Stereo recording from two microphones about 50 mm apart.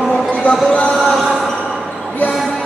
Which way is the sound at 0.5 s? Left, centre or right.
Left.